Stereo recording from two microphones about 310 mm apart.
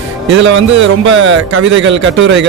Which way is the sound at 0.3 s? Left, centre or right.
Right.